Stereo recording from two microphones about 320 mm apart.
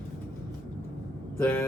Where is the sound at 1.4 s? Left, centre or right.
Centre.